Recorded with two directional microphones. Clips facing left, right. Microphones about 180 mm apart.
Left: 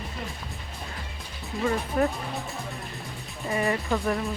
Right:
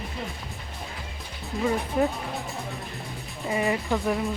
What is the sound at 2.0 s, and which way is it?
Speech, 15° right (ahead or behind).